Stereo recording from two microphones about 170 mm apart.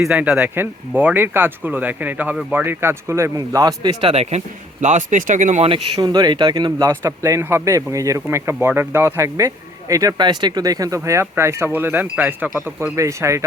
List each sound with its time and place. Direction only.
0.0 s speech: 5° right (ahead or behind); by 4.1 s 25° right (ahead or behind)
4.1 s speech: 40° right (ahead or behind)
5.6 s speech: 30° right (ahead or behind)